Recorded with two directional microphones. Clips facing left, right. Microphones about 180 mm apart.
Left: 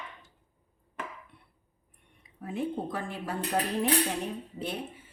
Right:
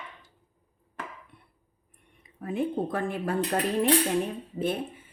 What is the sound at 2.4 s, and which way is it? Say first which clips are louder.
Speech: right 4 dB; 55° right (ahead or behind).